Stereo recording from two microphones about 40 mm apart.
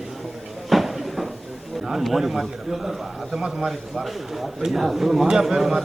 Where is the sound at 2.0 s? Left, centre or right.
Centre.